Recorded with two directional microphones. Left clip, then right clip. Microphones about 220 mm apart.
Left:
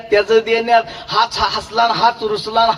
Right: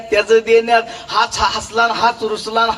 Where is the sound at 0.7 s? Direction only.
35° left (ahead or behind).